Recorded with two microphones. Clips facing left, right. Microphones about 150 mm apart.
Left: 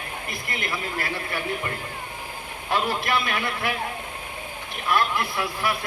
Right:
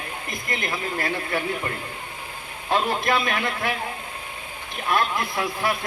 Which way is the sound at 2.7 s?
40° right (ahead or behind).